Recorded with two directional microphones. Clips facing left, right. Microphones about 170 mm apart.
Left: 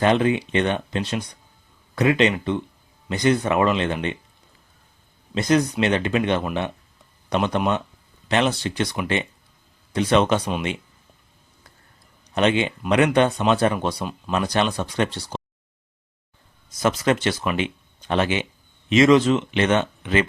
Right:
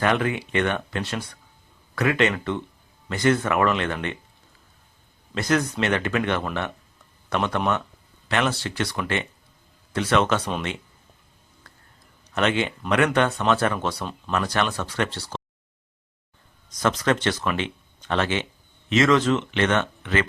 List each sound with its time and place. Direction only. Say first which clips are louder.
0.0 s speech: left 4 dB; 20° left (ahead or behind)
5.3 s speech: left 4 dB; 20° left (ahead or behind)
12.3 s speech: left 3 dB; 20° left (ahead or behind)
16.6 s speech: left 2 dB; 10° left (ahead or behind)